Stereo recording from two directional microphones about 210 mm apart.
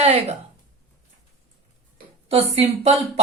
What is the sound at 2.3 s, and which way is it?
Speech, 30° right (ahead or behind).